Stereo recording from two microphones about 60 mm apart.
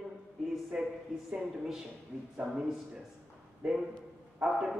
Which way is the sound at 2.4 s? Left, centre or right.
Centre.